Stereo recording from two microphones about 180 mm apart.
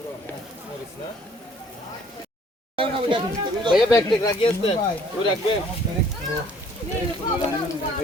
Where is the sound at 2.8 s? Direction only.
30° right (ahead or behind).